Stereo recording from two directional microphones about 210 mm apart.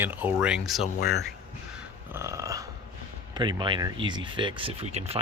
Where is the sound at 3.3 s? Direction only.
20° right (ahead or behind).